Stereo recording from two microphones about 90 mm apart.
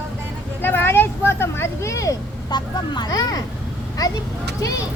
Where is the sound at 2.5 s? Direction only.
50° left (ahead or behind).